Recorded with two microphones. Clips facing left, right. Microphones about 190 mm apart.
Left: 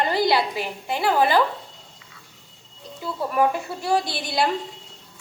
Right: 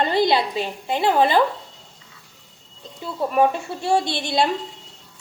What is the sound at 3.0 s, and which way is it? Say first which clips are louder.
A woman's voice: right 3 dB; 25° right (ahead or behind).